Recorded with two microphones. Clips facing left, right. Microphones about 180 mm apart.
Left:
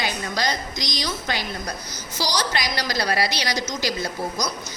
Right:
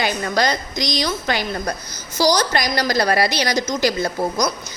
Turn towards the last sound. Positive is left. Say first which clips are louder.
# right 6 dB
turn(degrees=-55)  # may be behind; listen again after turning